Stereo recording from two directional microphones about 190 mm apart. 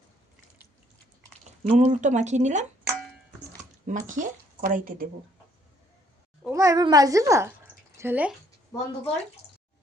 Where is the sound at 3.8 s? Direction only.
40° right (ahead or behind).